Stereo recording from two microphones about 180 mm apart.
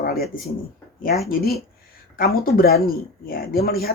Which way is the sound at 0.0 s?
60° left (ahead or behind).